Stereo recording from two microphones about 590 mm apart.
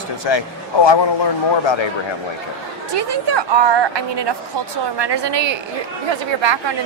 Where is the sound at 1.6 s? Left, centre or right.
Left.